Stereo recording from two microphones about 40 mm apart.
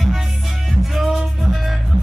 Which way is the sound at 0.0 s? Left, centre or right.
Centre.